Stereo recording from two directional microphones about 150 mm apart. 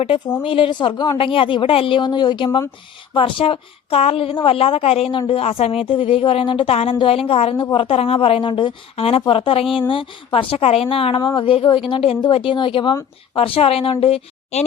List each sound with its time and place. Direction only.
0.4 s a woman's voice: 35° left (ahead or behind)